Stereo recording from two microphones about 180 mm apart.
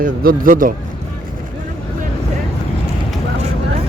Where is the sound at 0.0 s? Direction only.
55° right (ahead or behind).